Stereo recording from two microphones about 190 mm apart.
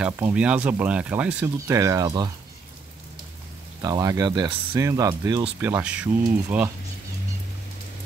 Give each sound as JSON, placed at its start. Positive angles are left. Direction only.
{"t": 0.0, "sound": "speech", "side_deg": -5}
{"t": 3.8, "sound": "speech", "side_deg": -20}